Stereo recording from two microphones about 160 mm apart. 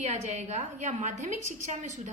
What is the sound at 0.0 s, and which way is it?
A woman's voice, 45° right (ahead or behind).